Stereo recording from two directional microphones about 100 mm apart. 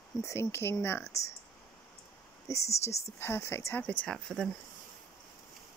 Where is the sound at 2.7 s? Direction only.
90° left.